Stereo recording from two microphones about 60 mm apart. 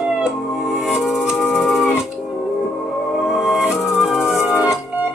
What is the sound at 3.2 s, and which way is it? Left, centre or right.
Music, centre.